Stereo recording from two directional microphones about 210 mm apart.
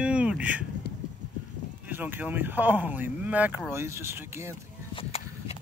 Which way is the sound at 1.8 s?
10° right (ahead or behind).